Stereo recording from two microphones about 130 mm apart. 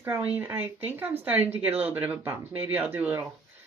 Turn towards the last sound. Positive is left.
turn(degrees=-15)  # may be behind; listen again after turning